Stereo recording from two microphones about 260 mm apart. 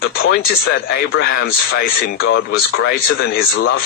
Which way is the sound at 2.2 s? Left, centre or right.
Left.